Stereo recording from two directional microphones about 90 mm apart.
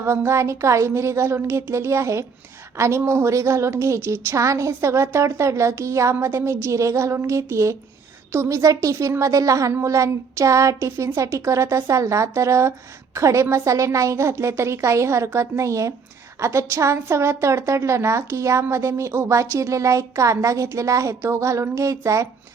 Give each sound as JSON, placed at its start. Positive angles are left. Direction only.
{"t": 0.0, "sound": "a woman's voice", "side_deg": -30}